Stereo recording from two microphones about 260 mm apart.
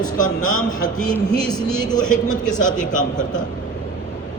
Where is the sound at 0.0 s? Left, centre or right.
Left.